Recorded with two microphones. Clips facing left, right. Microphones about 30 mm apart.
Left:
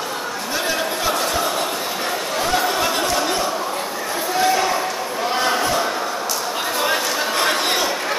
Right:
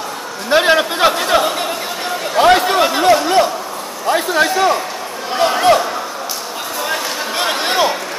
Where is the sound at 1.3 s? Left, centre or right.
Right.